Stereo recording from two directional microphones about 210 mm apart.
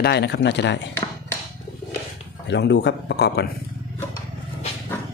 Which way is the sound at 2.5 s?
55° left (ahead or behind).